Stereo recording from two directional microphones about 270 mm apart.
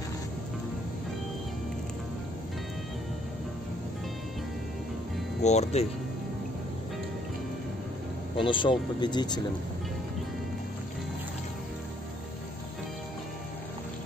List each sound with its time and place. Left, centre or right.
5.4 s speech: left
8.4 s speech: centre